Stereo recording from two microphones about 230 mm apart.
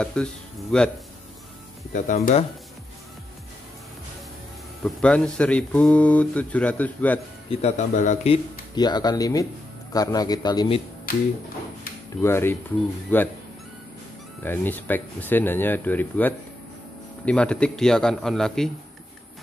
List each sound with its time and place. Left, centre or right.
0.0 s speech: centre
1.9 s speech: left
4.8 s speech: centre
7.6 s speech: left
11.1 s speech: left
12.2 s speech: centre
14.4 s speech: centre